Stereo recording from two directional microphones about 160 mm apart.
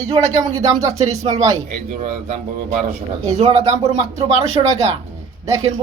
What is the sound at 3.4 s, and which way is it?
Speech, 40° right (ahead or behind).